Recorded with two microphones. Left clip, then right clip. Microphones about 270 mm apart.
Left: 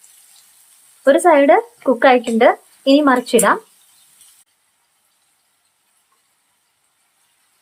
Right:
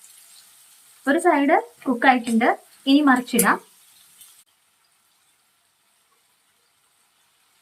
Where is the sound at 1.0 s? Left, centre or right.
Left.